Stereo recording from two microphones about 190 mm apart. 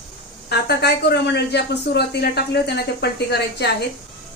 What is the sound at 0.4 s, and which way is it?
Speech, 60° left (ahead or behind).